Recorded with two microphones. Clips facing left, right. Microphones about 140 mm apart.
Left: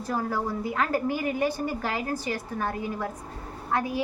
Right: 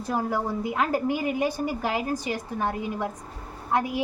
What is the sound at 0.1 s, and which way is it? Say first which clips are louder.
A woman's voice: right 2 dB; 15° right (ahead or behind).